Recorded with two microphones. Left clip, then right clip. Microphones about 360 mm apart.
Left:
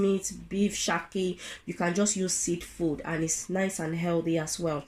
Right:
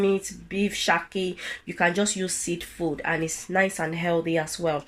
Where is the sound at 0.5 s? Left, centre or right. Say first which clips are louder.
Right 5 dB; right.